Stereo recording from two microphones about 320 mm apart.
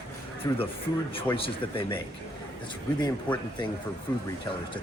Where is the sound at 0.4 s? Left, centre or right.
Centre.